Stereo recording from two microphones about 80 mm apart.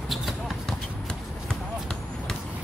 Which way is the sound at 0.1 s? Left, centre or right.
Centre.